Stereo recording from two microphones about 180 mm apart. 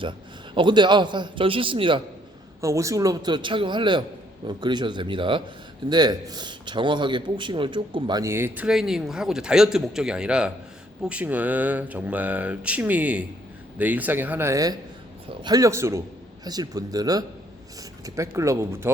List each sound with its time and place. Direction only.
0.5 s a man's voice: 25° right (ahead or behind)
2.6 s a man's voice: 15° right (ahead or behind)